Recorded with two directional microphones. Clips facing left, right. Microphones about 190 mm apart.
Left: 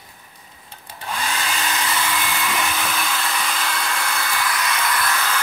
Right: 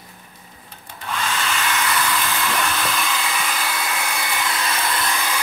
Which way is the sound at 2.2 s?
10° left (ahead or behind).